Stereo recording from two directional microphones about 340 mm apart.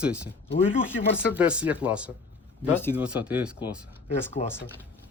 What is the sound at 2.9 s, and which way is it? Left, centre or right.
Speech, centre.